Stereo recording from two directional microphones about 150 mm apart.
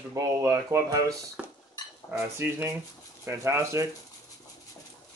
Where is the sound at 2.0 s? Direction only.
15° right (ahead or behind).